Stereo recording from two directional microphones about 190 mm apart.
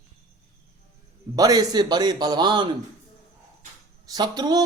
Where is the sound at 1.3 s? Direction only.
20° right (ahead or behind).